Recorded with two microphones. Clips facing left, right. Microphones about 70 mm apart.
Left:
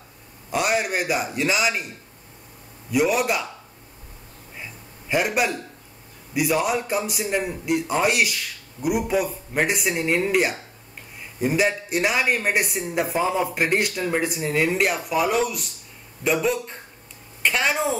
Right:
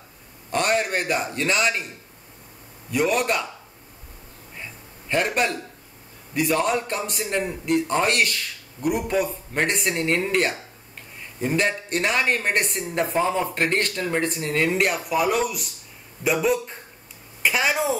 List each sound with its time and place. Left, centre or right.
0.5 s a man's voice: centre
2.9 s speech: centre
4.6 s a sound: centre
6.3 s a man's voice: centre